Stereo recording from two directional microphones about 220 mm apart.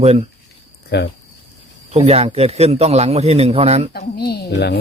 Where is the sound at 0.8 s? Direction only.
50° left (ahead or behind).